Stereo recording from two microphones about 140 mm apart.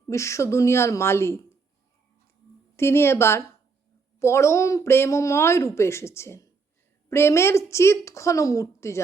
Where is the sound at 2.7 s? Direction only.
20° left (ahead or behind).